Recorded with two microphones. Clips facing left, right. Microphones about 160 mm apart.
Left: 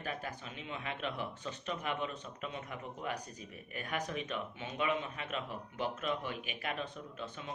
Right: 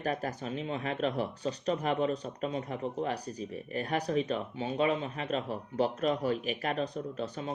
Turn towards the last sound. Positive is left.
turn(degrees=-40)  # may be behind; listen again after turning